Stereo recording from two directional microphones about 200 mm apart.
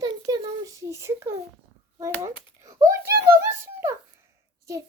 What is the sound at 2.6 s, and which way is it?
A child's voice, 15° right (ahead or behind).